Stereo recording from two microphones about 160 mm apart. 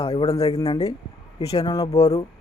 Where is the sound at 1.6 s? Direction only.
25° left (ahead or behind).